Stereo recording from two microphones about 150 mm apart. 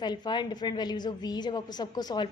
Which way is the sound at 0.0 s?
30° left (ahead or behind).